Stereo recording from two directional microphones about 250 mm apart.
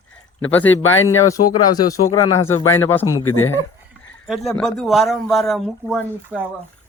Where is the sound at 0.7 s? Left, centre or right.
Left.